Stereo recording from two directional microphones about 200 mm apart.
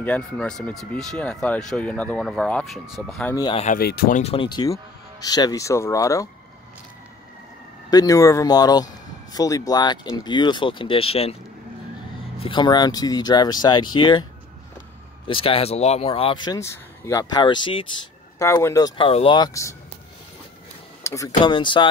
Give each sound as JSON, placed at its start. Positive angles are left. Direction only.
{"t": 0.0, "sound": "speech", "side_deg": 5}
{"t": 3.3, "sound": "speech", "side_deg": 20}
{"t": 3.6, "sound": "speech", "side_deg": 45}
{"t": 4.2, "sound": "speech", "side_deg": 25}
{"t": 7.9, "sound": "speech", "side_deg": 20}
{"t": 12.4, "sound": "speech", "side_deg": 25}
{"t": 15.2, "sound": "speech", "side_deg": 25}
{"t": 16.5, "sound": "speech", "side_deg": 15}
{"t": 18.4, "sound": "speech", "side_deg": 15}
{"t": 21.0, "sound": "speech", "side_deg": 15}